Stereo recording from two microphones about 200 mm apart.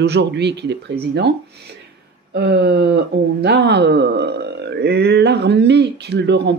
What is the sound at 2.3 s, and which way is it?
Speech, 55° right (ahead or behind).